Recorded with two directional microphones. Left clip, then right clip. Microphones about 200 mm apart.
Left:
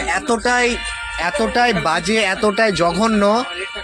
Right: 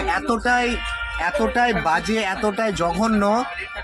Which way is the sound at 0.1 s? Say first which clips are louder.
Left 3 dB; 20° left (ahead or behind).